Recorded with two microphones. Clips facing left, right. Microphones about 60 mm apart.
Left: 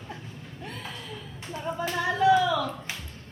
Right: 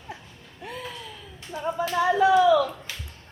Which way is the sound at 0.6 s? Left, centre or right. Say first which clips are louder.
Right 4 dB; centre.